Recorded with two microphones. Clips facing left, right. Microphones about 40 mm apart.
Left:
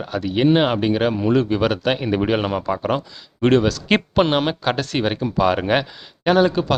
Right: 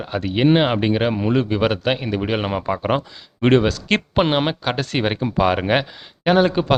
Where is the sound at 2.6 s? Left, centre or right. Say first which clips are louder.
Right 1 dB; centre.